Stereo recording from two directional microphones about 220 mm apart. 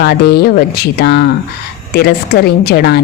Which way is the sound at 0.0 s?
45° left (ahead or behind).